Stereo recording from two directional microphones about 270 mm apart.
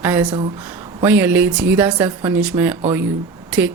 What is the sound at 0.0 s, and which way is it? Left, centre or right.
Speech, centre.